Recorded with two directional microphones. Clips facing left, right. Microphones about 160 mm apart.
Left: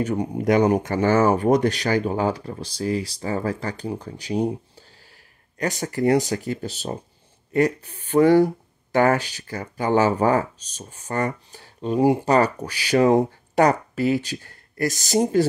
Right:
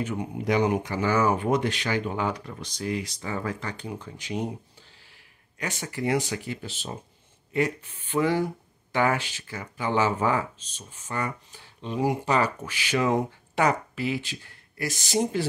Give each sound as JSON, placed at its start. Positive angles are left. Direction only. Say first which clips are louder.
{"t": 0.0, "sound": "speech", "louder": "left 7 dB", "side_deg": 40}